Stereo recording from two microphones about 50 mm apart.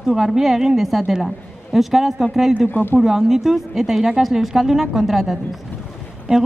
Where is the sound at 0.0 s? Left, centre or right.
Centre.